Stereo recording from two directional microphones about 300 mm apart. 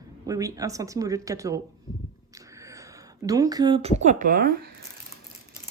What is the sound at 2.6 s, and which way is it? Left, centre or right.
Speech, centre.